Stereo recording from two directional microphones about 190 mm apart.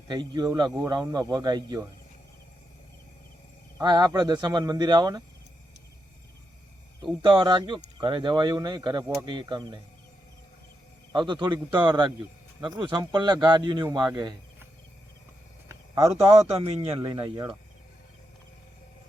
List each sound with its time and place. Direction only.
0.1 s speech: 20° right (ahead or behind)
3.8 s speech: 20° right (ahead or behind)
7.0 s speech: 25° right (ahead or behind)
11.1 s speech: 25° right (ahead or behind)
15.7 s speech: 15° right (ahead or behind)
16.6 s speech: 30° right (ahead or behind)